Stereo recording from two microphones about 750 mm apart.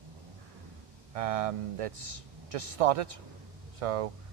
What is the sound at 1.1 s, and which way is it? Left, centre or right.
Speech, right.